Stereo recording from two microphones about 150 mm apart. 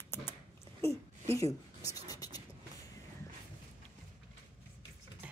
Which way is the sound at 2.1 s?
25° left (ahead or behind).